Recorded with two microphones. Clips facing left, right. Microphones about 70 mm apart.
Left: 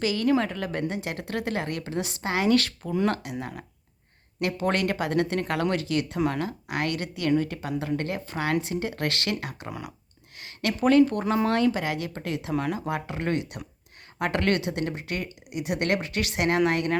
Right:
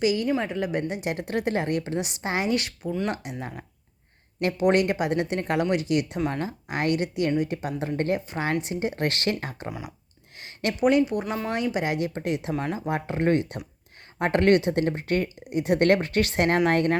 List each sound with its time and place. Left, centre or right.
0.0 s speech: centre
6.1 s speech: centre
6.4 s speech: right
9.6 s speech: centre
10.3 s a sound: right
10.8 s speech: centre; by 17.0 s right